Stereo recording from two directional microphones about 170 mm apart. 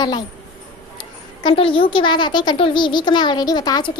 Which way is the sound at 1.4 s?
30° left (ahead or behind).